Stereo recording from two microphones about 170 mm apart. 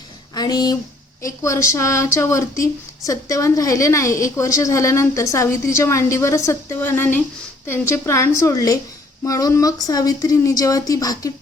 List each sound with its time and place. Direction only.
0.3 s a woman's voice: 25° left (ahead or behind)